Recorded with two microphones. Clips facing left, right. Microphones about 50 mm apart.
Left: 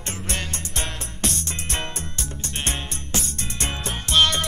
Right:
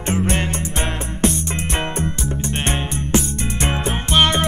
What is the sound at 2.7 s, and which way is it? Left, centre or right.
Music, right.